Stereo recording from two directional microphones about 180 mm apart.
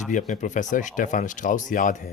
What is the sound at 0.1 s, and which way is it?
Speech, 45° left (ahead or behind).